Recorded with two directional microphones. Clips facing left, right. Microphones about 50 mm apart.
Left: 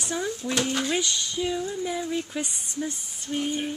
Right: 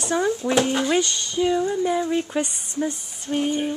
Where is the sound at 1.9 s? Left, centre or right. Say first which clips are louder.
Right 7 dB; right.